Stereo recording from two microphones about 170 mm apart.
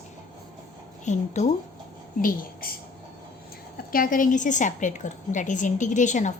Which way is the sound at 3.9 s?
55° left (ahead or behind).